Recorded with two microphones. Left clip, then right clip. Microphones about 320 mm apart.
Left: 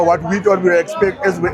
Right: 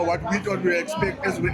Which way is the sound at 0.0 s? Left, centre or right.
Left.